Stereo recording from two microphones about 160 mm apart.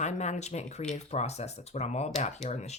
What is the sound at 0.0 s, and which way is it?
Speech, 45° left (ahead or behind).